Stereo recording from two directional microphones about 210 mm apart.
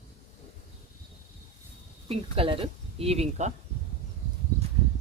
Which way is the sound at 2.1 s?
25° right (ahead or behind).